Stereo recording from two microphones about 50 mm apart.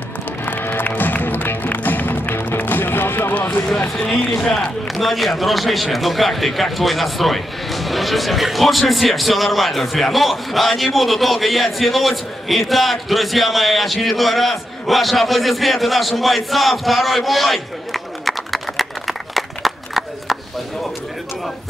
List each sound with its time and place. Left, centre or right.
0.5 s music: left
3.9 s a man's voice: centre